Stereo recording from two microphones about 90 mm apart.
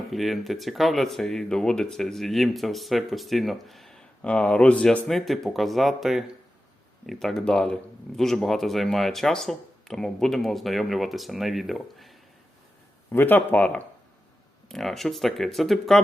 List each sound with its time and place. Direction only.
0.1 s speech: centre (ahead or behind)
13.1 s speech: 25° left (ahead or behind)
14.7 s speech: 5° left (ahead or behind)